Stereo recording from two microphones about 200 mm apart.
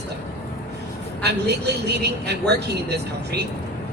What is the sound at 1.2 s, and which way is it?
A man's voice, 55° right (ahead or behind).